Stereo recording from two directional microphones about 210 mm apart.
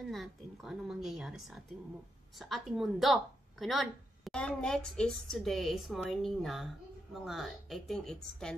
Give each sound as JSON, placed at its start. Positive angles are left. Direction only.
{"t": 0.0, "sound": "a woman's voice", "side_deg": 0}